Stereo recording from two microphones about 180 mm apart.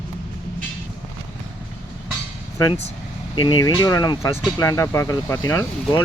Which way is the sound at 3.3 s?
25° left (ahead or behind).